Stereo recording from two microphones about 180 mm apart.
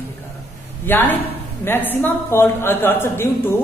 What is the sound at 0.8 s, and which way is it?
A woman's voice, 10° left (ahead or behind).